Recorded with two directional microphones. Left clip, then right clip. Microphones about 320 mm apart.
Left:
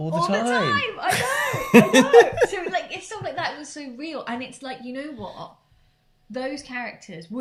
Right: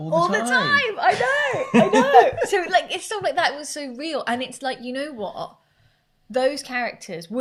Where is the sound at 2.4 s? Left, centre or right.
Centre.